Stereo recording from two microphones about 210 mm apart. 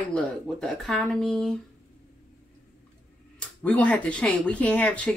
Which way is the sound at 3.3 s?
5° left (ahead or behind).